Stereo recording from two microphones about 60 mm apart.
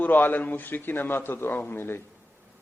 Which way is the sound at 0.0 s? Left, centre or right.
Left.